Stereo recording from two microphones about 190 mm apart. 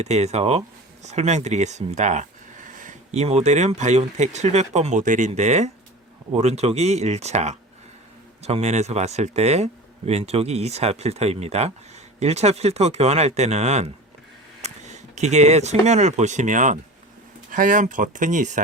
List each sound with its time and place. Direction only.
0.0 s speech: 35° right (ahead or behind)